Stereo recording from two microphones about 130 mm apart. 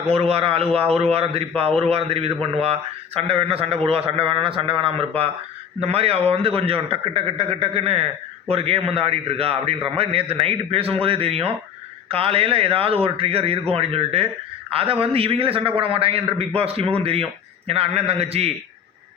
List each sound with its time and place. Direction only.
0.1 s a man's voice: 50° right (ahead or behind)